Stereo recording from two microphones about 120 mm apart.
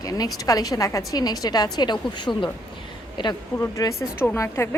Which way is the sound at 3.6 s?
25° left (ahead or behind).